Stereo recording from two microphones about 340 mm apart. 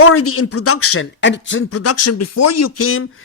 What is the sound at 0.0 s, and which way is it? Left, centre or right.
A man's voice, left.